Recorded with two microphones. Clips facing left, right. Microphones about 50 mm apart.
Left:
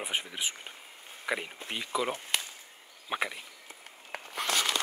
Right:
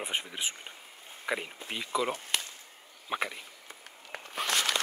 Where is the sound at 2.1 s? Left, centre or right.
Left.